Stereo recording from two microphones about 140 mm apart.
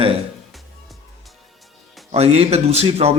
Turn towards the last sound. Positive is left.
turn(degrees=-45)  # may be behind; listen again after turning